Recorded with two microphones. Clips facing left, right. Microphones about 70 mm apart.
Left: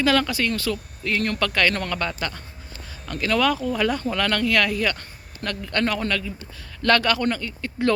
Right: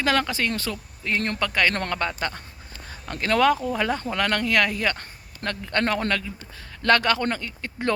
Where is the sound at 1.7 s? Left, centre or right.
Right.